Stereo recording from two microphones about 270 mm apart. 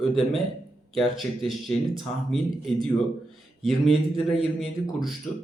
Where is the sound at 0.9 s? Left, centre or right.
Centre.